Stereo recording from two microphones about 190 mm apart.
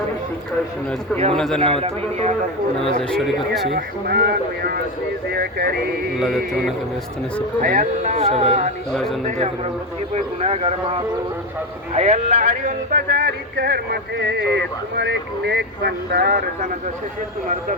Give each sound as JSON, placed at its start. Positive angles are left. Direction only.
{"t": 1.3, "sound": "speech", "side_deg": 5}
{"t": 1.6, "sound": "music", "side_deg": -30}
{"t": 3.0, "sound": "speech", "side_deg": 0}
{"t": 3.7, "sound": "speech", "side_deg": -55}
{"t": 6.1, "sound": "speech", "side_deg": 0}
{"t": 7.6, "sound": "music", "side_deg": -45}
{"t": 8.9, "sound": "speech", "side_deg": 0}
{"t": 10.4, "sound": "music", "side_deg": -35}
{"t": 11.9, "sound": "speech", "side_deg": -35}